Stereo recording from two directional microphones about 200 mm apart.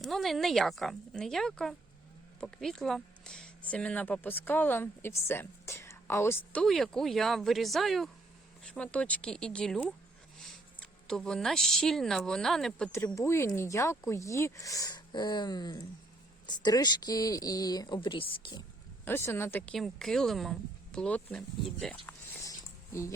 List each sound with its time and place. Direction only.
0.0 s a woman's voice: centre (ahead or behind)
13.1 s speech: 15° left (ahead or behind)
19.0 s speech: 10° left (ahead or behind)
22.4 s a sound: 15° left (ahead or behind)